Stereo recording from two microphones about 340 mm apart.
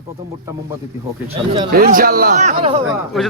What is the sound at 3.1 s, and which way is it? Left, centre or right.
Speech, centre.